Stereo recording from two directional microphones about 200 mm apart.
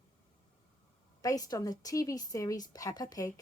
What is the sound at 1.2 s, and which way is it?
Speech, 20° left (ahead or behind).